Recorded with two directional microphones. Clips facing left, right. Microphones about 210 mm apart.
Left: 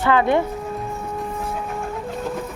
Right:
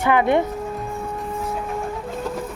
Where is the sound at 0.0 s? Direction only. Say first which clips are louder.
Even; 15° right (ahead or behind).